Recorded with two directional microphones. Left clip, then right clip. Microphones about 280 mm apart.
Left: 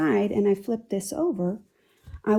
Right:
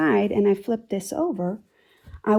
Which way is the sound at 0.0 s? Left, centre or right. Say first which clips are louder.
Right 3 dB; right.